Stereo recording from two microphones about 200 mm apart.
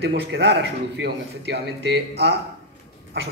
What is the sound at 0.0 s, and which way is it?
A man's voice, 55° right (ahead or behind).